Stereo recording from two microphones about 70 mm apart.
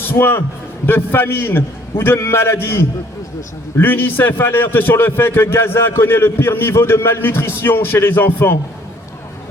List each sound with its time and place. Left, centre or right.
0.0 s a man's voice: left